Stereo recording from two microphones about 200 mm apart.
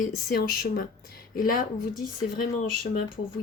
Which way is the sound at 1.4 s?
45° left (ahead or behind).